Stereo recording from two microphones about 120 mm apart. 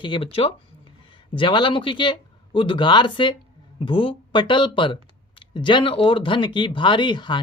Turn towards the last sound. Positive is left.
turn(degrees=40)  # may be behind; listen again after turning